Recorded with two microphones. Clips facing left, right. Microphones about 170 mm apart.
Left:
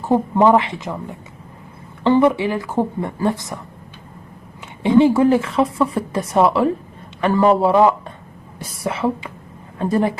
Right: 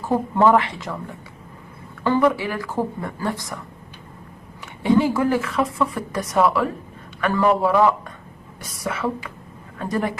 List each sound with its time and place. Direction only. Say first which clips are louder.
0.0 s speech: left 3 dB; 20° left (ahead or behind)
4.8 s a woman's voice: left 5 dB; 25° left (ahead or behind)